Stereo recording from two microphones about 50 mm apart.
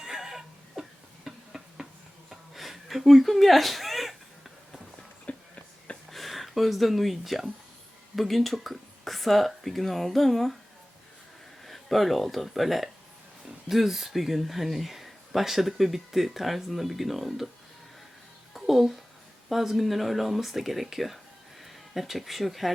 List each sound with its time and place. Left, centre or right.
0.0 s a sound: centre
5.3 s a sound: left
6.1 s speech: centre
11.6 s speech: centre
18.5 s music: centre
19.5 s speech: centre